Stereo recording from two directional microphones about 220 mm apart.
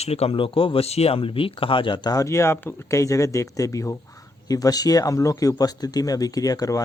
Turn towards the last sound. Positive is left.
turn(degrees=15)  # may be behind; listen again after turning